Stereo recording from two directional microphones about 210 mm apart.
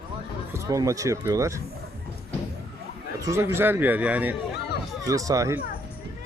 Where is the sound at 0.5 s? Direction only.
15° right (ahead or behind).